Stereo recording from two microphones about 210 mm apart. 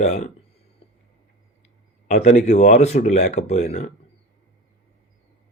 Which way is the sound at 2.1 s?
35° left (ahead or behind).